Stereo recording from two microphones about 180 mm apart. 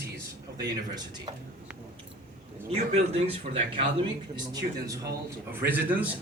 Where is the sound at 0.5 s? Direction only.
20° right (ahead or behind).